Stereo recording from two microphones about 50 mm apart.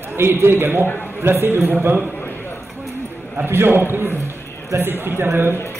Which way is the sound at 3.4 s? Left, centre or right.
Right.